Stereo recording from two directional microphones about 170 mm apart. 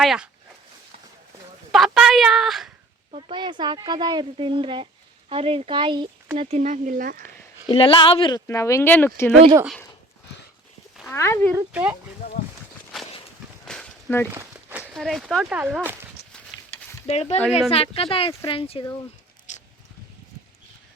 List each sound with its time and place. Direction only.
0.0 s speech: centre (ahead or behind)
1.7 s speech: centre (ahead or behind)
3.1 s speech: 30° right (ahead or behind); by 7.3 s 55° right (ahead or behind)
7.7 s speech: 30° left (ahead or behind)
8.4 s speech: 15° left (ahead or behind)
11.1 s speech: 15° left (ahead or behind)
11.5 s speech: 10° right (ahead or behind)
13.7 s a sound: 10° left (ahead or behind)
14.3 s speech: 15° right (ahead or behind)
17.1 s speech: 40° left (ahead or behind)
19.5 s a sound: 45° left (ahead or behind)